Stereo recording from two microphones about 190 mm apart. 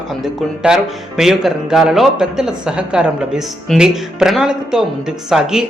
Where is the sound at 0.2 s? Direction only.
5° right (ahead or behind).